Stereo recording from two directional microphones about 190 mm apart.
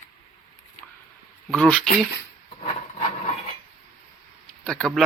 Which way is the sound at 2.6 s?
30° left (ahead or behind).